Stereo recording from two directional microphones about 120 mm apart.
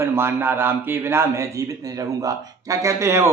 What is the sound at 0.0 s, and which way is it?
Mantra, 20° right (ahead or behind).